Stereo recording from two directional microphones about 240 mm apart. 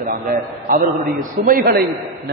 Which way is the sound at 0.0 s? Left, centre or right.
Right.